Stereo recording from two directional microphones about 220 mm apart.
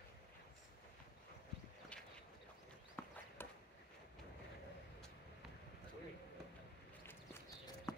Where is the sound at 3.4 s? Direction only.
10° left (ahead or behind).